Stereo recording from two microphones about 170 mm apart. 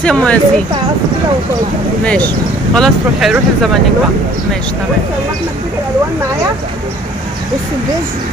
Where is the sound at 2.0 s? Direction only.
10° left (ahead or behind).